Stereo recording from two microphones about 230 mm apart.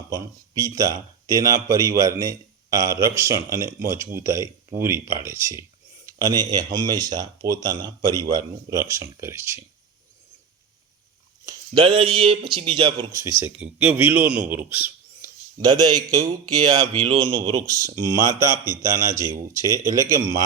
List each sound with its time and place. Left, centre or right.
0.1 s speech: centre
11.4 s a man's voice: centre